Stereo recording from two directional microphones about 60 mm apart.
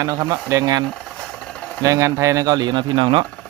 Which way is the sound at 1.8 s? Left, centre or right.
Right.